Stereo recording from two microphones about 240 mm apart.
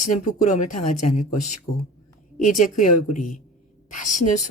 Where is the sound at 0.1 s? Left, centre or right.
Left.